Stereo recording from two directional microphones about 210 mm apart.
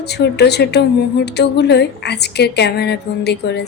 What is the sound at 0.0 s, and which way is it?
A woman's voice, 50° left (ahead or behind).